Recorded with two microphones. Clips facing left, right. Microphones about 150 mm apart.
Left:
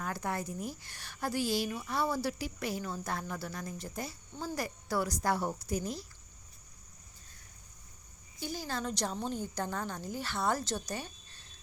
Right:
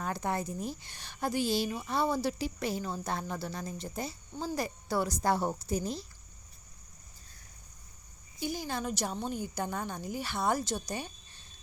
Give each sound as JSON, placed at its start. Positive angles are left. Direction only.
{"t": 0.0, "sound": "a woman's voice", "side_deg": -25}
{"t": 8.4, "sound": "speech", "side_deg": -15}